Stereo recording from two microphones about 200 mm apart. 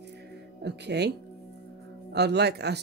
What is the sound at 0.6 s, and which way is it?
Speech, 60° right (ahead or behind).